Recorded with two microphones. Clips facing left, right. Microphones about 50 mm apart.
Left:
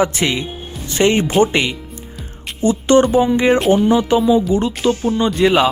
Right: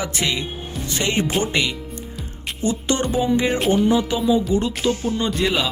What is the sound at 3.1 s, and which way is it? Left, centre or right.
Music, left.